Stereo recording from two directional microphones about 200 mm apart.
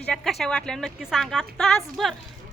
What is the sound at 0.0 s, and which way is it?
A woman's voice, centre (ahead or behind).